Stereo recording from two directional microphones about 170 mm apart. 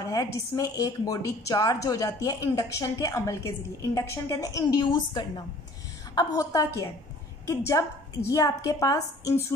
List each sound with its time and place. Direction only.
0.1 s a woman's voice: 20° left (ahead or behind)